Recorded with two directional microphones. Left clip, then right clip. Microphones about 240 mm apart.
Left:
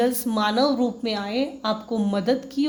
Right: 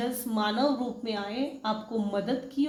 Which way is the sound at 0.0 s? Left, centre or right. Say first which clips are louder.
Left 8 dB; left.